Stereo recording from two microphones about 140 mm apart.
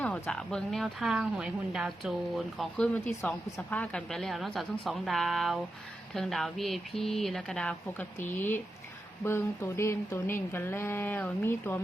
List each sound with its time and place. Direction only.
0.0 s speech: 5° left (ahead or behind)